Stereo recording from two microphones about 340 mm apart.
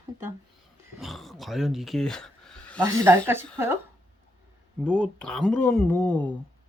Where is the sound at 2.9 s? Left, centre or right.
Centre.